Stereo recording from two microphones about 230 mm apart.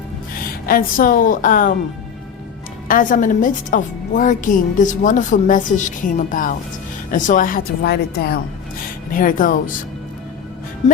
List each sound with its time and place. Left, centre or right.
0.7 s a woman's voice: left
2.8 s a woman's voice: left